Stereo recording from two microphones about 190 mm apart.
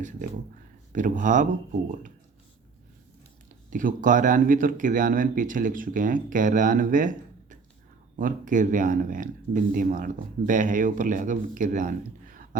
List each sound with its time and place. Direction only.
0.9 s speech: 40° right (ahead or behind)
3.7 s speech: 45° right (ahead or behind)